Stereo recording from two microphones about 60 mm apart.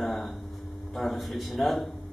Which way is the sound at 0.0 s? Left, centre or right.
Centre.